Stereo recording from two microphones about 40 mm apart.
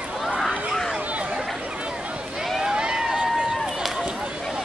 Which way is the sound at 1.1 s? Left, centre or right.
Right.